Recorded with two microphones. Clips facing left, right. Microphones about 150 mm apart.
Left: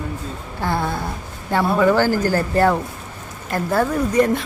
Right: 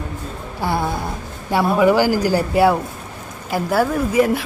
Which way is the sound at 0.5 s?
10° right (ahead or behind).